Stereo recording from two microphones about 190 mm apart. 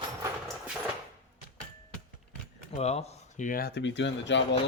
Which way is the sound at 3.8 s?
70° left (ahead or behind).